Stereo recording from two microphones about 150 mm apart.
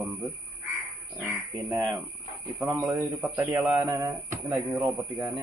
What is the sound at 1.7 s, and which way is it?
Speech, 25° right (ahead or behind).